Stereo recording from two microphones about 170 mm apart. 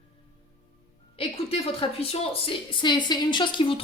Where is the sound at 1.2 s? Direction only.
35° left (ahead or behind).